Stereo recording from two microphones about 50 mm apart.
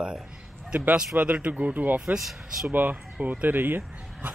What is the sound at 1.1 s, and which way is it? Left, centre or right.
A man's voice, right.